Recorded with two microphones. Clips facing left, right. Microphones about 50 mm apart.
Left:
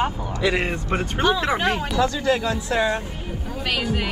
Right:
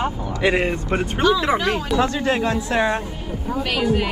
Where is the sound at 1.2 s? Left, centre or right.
Left.